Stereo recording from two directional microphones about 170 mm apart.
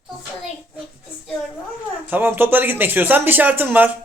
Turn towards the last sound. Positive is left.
turn(degrees=-10)  # may be behind; listen again after turning